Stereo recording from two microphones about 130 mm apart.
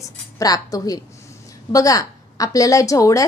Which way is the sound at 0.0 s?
25° left (ahead or behind).